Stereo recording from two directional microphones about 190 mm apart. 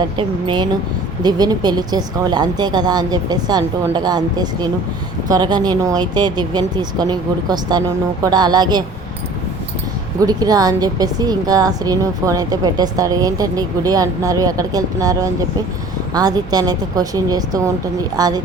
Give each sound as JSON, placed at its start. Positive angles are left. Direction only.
{"t": 0.2, "sound": "a woman's voice", "side_deg": -25}
{"t": 10.2, "sound": "a woman's voice", "side_deg": -20}